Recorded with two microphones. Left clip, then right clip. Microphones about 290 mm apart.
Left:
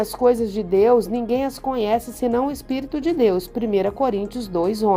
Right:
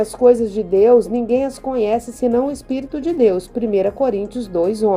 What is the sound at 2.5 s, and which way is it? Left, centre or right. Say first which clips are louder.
A woman's voice: right 2 dB; left.